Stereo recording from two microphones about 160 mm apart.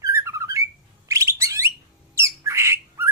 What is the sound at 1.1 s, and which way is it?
Bird, 20° right (ahead or behind).